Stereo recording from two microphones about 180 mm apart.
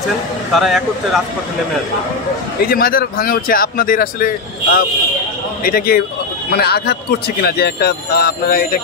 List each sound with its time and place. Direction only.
0.6 s speech: centre (ahead or behind)
2.7 s speech: 55° left (ahead or behind)